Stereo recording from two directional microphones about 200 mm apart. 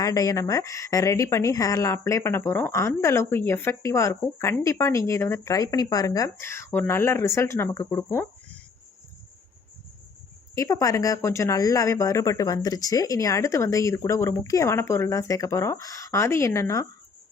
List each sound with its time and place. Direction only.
0.0 s speech: 15° left (ahead or behind)
10.5 s speech: 15° left (ahead or behind)